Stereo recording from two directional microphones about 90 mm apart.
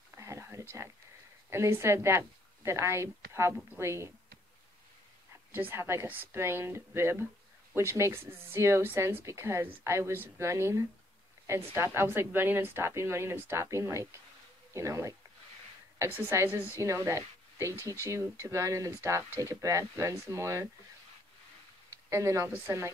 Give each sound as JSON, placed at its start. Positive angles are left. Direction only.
{"t": 0.1, "sound": "whispering", "side_deg": -35}
{"t": 1.5, "sound": "a woman's voice", "side_deg": -30}
{"t": 5.5, "sound": "a woman's voice", "side_deg": -25}
{"t": 22.1, "sound": "a woman's voice", "side_deg": -30}